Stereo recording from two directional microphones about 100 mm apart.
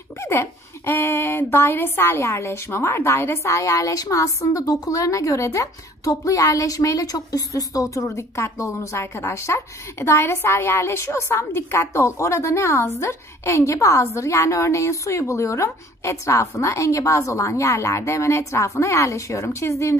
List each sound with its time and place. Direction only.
0.2 s a woman's voice: 25° left (ahead or behind)